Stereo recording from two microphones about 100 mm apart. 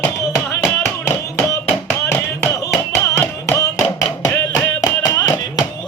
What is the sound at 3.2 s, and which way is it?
Music, 30° left (ahead or behind).